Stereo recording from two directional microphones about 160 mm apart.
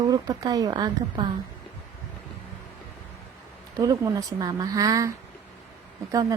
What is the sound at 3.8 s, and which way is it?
Speech, 20° right (ahead or behind).